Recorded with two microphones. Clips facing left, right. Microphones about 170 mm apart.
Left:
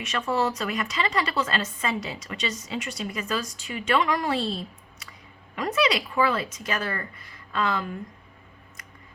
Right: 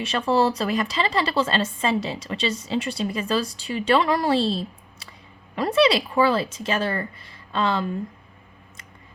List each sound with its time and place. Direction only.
0.0 s a woman's voice: 30° right (ahead or behind)